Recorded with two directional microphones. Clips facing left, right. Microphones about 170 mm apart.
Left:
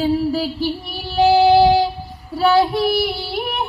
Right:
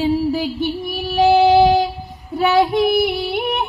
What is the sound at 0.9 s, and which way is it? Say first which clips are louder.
Child singing: right 1 dB; 20° right (ahead or behind).